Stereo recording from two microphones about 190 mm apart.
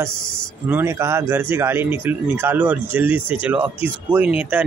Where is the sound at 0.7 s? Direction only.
10° right (ahead or behind).